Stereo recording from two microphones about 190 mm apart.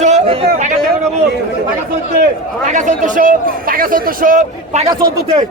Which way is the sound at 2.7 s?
40° right (ahead or behind).